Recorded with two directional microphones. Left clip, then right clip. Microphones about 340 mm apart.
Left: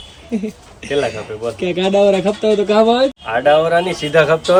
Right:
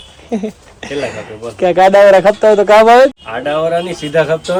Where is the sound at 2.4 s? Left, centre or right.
Centre.